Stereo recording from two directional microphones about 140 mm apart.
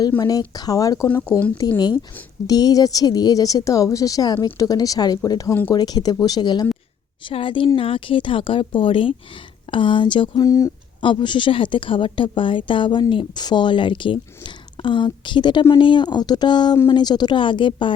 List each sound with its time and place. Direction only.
0.2 s speech: 25° left (ahead or behind)
1.0 s speech: 10° left (ahead or behind)
2.5 s a woman's voice: 25° left (ahead or behind)
11.0 s a woman's voice: 35° left (ahead or behind)